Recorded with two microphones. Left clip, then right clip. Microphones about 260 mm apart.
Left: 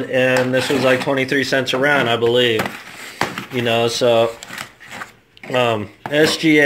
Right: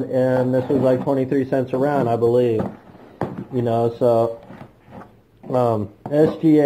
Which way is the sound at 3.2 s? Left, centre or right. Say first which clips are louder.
Left 4 dB; centre.